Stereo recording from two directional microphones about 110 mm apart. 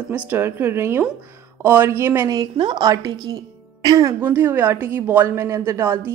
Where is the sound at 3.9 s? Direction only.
30° right (ahead or behind).